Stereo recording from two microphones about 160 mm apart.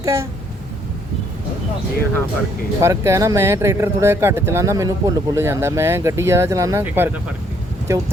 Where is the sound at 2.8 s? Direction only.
20° right (ahead or behind).